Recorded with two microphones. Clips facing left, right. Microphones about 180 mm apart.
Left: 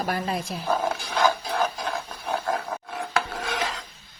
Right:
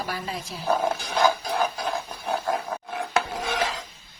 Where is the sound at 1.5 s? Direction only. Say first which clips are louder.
Right 1 dB; 5° right (ahead or behind).